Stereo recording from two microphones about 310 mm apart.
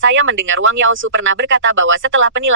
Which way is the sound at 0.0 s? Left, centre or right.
Right.